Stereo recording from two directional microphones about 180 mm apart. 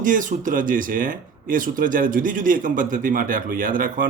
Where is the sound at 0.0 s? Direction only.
45° right (ahead or behind).